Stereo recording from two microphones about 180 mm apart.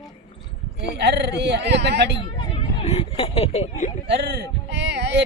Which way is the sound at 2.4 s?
35° left (ahead or behind).